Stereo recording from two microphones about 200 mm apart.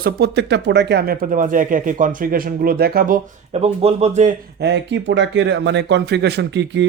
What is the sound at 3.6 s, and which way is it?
Speech, 30° right (ahead or behind).